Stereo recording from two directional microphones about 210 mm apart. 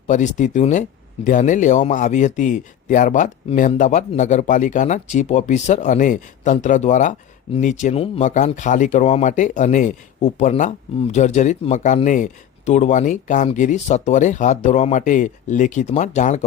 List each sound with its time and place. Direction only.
0.1 s speech: 35° left (ahead or behind)